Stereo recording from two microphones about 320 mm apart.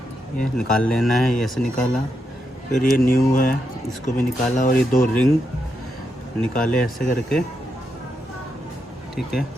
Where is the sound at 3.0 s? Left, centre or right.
Left.